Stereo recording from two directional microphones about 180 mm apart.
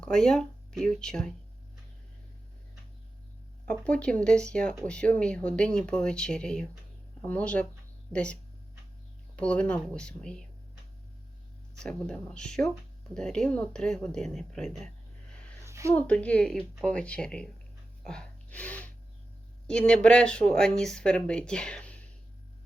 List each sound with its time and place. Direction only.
0.0 s speech: 5° left (ahead or behind)
3.7 s speech: 5° left (ahead or behind)
11.8 s speech: 5° left (ahead or behind)
15.3 s a sound: 5° left (ahead or behind)
15.6 s a sound: 15° right (ahead or behind)
15.9 s speech: 5° left (ahead or behind)
18.0 s gasp: 5° left (ahead or behind)
19.6 s speech: 5° left (ahead or behind)